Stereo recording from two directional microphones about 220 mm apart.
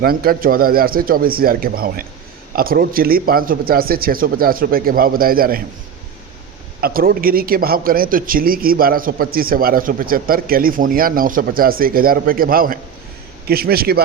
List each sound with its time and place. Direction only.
0.0 s a man's voice: 45° right (ahead or behind)
6.8 s a man's voice: 40° right (ahead or behind)